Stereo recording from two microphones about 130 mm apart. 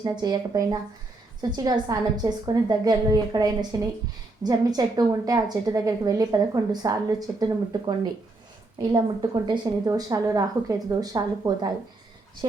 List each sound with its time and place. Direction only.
0.0 s a woman's voice: 30° right (ahead or behind)